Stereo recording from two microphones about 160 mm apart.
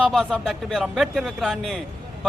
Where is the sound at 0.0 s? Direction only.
Centre (ahead or behind).